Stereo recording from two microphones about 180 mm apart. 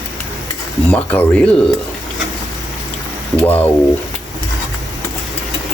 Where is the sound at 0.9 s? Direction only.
5° left (ahead or behind).